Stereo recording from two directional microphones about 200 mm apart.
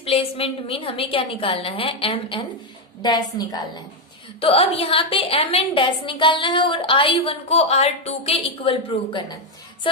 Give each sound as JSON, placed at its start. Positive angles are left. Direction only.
{"t": 0.0, "sound": "a woman's voice", "side_deg": 30}